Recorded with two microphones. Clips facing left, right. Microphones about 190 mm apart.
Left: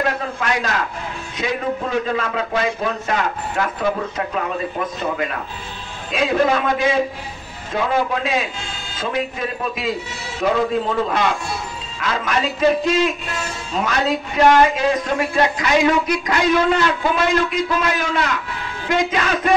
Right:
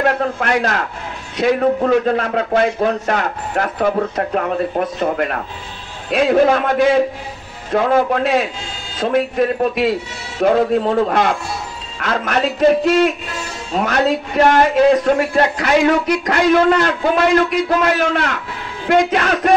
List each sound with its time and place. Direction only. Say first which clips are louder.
0.4 s a man's voice: right 4 dB; 60° right (ahead or behind)
10.4 s a man's voice: right 5 dB; 50° right (ahead or behind); by 19.5 s 65° right (ahead or behind)